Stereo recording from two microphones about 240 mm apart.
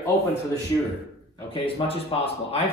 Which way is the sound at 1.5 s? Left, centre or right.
Left.